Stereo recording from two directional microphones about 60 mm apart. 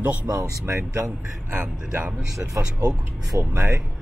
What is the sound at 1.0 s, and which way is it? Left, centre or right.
Speech, right.